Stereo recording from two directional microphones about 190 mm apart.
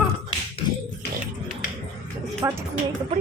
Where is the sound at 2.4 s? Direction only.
15° right (ahead or behind).